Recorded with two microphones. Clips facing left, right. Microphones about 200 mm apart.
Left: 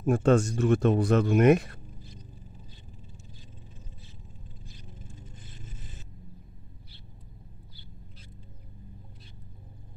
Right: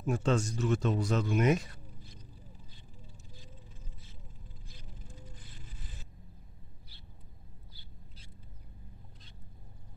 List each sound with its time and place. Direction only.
0.0 s speech: 55° left (ahead or behind)
5.2 s scrape: 25° left (ahead or behind)